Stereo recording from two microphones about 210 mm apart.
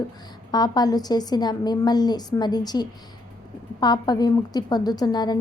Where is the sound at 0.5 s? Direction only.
20° left (ahead or behind).